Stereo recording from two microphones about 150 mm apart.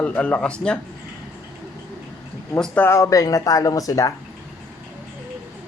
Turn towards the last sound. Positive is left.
turn(degrees=25)  # may be behind; listen again after turning